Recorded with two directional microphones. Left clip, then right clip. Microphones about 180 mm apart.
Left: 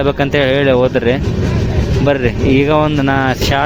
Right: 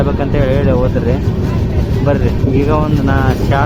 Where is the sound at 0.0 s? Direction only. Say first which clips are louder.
Left 3 dB; 35° left (ahead or behind).